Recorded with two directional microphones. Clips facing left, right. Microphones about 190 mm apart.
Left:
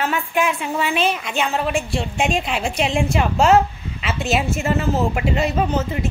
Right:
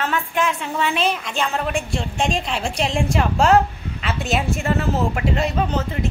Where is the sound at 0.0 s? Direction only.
10° left (ahead or behind).